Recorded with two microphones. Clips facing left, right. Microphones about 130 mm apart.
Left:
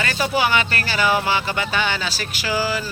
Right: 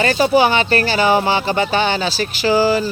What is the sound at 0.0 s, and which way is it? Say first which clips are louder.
Speech: right 8 dB; 30° right (ahead or behind).